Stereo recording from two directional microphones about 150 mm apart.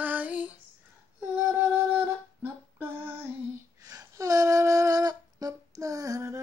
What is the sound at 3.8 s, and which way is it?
Humming, 20° right (ahead or behind).